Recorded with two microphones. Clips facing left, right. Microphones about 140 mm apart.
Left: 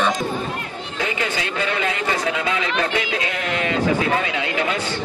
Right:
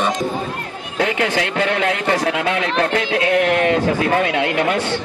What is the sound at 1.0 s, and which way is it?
Speech, 70° right (ahead or behind).